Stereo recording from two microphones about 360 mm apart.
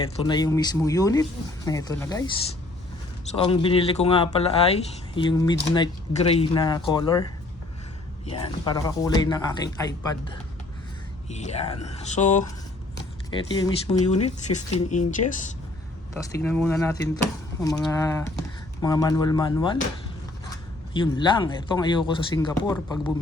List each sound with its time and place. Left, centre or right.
0.2 s speech: centre
11.3 s speech: centre
16.1 s speech: centre
20.9 s speech: centre